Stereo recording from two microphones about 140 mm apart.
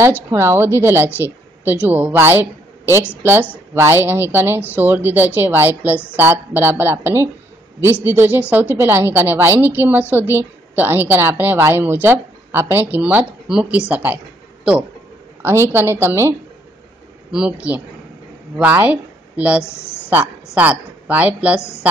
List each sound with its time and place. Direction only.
0.3 s a woman's voice: 20° right (ahead or behind)
19.6 s speech: 20° left (ahead or behind)
20.5 s a woman's voice: 10° right (ahead or behind)